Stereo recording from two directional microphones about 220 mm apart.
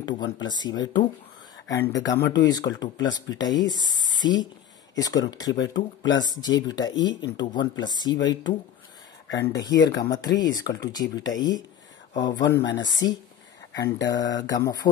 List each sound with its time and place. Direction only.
0.2 s speech: 20° left (ahead or behind)